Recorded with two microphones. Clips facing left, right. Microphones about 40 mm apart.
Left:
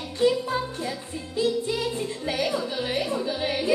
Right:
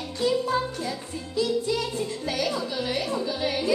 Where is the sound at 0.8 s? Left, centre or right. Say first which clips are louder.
Even; left.